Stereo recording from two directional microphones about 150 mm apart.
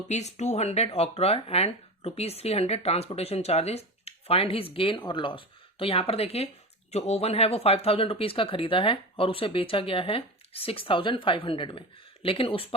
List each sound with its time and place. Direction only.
0.1 s speech: 50° left (ahead or behind)